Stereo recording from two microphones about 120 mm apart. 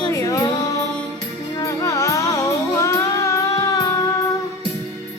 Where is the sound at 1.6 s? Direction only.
25° left (ahead or behind).